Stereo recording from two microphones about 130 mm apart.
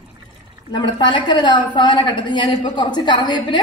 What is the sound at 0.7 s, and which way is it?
A woman's voice, 35° left (ahead or behind).